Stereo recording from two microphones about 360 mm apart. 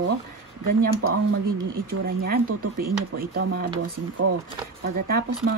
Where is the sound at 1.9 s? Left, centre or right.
Right.